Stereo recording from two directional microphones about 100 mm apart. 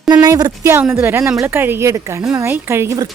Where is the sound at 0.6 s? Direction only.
25° right (ahead or behind).